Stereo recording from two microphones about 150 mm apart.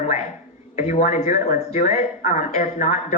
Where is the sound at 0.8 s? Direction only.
50° left (ahead or behind).